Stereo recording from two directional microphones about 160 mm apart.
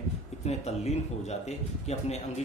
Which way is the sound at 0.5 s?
45° left (ahead or behind).